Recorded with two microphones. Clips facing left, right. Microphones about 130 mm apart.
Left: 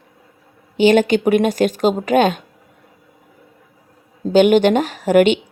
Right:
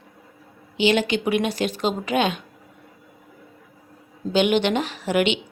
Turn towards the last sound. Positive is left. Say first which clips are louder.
# left 8 dB
turn(degrees=45)  # may be behind; listen again after turning